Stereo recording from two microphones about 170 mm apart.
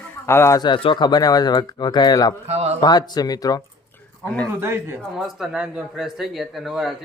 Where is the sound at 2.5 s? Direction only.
40° right (ahead or behind).